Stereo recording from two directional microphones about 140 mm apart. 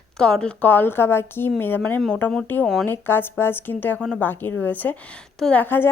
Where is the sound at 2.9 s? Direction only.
15° left (ahead or behind).